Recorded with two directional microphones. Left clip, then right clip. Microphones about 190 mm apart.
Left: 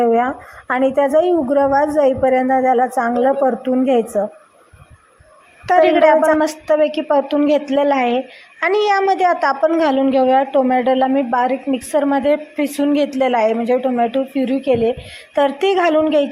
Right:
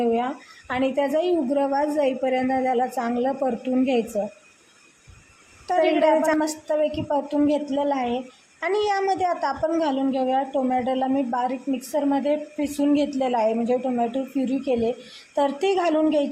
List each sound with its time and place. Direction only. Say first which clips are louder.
0.0 s a woman's voice: left 8 dB; 15° left (ahead or behind)
5.6 s a woman's voice: left 8 dB; 20° left (ahead or behind)